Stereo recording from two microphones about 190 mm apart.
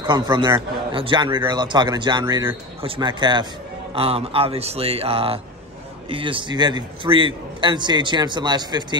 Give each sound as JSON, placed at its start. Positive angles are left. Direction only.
{"t": 0.0, "sound": "a man's voice", "side_deg": -20}